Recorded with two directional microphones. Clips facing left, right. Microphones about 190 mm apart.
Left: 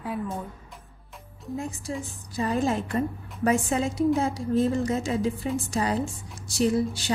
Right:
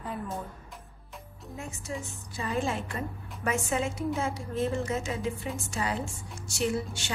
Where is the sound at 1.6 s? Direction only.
35° left (ahead or behind).